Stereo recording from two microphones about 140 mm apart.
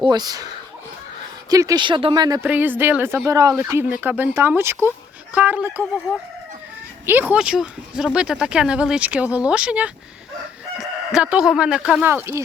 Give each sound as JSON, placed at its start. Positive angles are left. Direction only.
{"t": 0.0, "sound": "speech", "side_deg": -30}
{"t": 1.5, "sound": "speech", "side_deg": -25}
{"t": 2.5, "sound": "speech", "side_deg": -15}
{"t": 7.0, "sound": "speech", "side_deg": -15}